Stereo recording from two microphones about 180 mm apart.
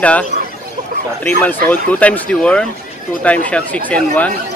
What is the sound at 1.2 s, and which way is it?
A man's voice, 10° left (ahead or behind).